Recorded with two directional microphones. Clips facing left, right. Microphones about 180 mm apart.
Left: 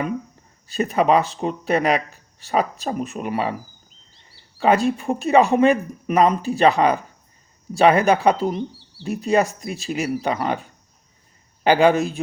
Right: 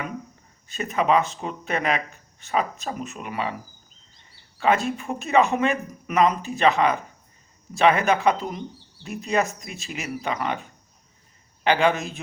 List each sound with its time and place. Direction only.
0.7 s speech: 35° left (ahead or behind)
4.9 s speech: 35° left (ahead or behind)